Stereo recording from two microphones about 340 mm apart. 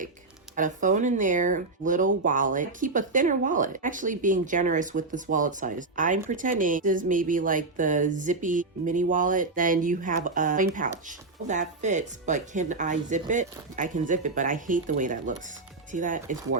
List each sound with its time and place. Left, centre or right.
0.5 s speech: right